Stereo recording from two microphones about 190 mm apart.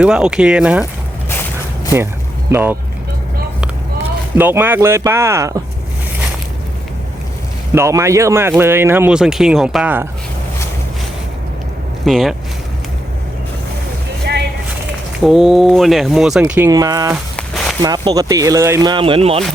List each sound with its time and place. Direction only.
0.0 s speech: 5° right (ahead or behind)
1.3 s a sound: 10° left (ahead or behind)
2.5 s speech: 10° right (ahead or behind)
4.4 s speech: 10° right (ahead or behind)
7.8 s speech: 15° right (ahead or behind)
12.0 s speech: centre (ahead or behind)
15.2 s speech: centre (ahead or behind)
16.6 s speech: 20° right (ahead or behind)
17.3 s a sound: 5° left (ahead or behind)
17.8 s speech: 20° right (ahead or behind)